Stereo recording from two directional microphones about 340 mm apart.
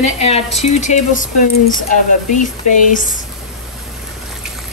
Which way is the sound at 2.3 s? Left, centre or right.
Left.